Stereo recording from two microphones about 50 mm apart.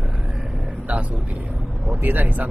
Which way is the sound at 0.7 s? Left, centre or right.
Right.